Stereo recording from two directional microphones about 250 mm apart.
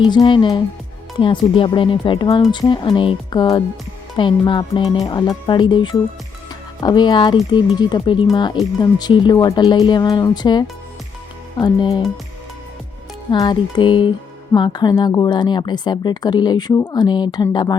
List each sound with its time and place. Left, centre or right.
0.0 s speech: centre
13.3 s speech: centre